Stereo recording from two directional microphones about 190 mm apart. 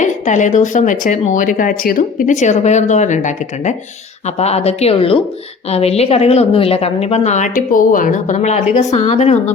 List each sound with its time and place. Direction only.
0.0 s a woman's voice: 40° left (ahead or behind)